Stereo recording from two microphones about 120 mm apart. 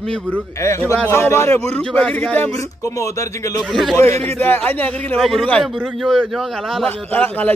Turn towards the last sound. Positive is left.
turn(degrees=15)  # may be behind; listen again after turning